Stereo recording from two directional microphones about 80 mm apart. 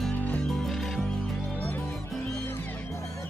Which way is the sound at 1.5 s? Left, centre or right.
Left.